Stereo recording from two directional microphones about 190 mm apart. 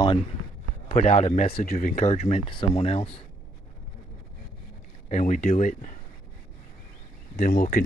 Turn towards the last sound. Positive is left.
turn(degrees=45)  # may be behind; listen again after turning